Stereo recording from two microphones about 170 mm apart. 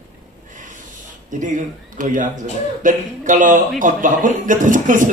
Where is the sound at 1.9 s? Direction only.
50° right (ahead or behind).